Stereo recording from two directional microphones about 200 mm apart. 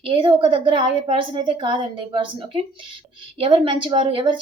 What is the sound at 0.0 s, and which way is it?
A woman's voice, 25° right (ahead or behind).